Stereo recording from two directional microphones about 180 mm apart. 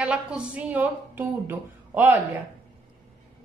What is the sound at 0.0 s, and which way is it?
Speech, 5° right (ahead or behind).